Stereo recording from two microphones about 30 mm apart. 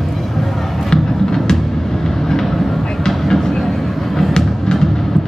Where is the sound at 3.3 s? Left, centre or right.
Centre.